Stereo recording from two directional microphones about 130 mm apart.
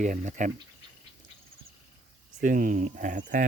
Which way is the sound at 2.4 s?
90° right.